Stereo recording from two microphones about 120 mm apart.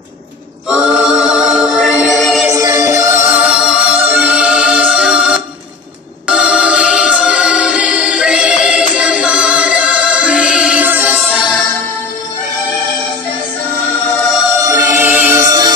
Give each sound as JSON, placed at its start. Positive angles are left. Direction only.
{"t": 0.7, "sound": "a capella", "side_deg": -5}
{"t": 1.2, "sound": "music", "side_deg": -5}
{"t": 2.5, "sound": "music", "side_deg": -25}
{"t": 3.3, "sound": "music", "side_deg": -10}
{"t": 14.7, "sound": "music", "side_deg": -25}